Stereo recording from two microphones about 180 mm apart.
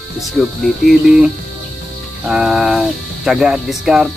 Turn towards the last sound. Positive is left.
turn(degrees=-5)  # may be behind; listen again after turning